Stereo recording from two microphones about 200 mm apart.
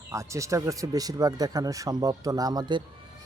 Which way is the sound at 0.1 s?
15° right (ahead or behind).